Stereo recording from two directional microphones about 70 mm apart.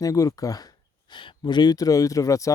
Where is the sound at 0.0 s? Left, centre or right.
Left.